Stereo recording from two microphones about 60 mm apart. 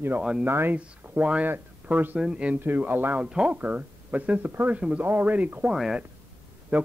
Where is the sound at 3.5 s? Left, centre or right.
Right.